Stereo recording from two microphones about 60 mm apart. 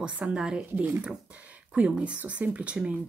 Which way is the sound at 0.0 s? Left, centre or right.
Centre.